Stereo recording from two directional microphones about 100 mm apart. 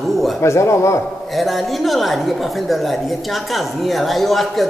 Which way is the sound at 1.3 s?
Centre (ahead or behind).